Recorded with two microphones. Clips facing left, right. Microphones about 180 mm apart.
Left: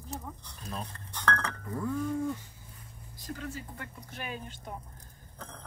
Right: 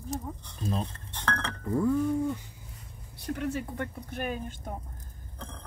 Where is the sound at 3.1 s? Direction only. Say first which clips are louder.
Right 8 dB; 70° right (ahead or behind); by 4.6 s 50° right (ahead or behind).